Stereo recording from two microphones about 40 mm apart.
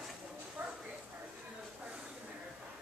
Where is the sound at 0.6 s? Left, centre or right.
Right.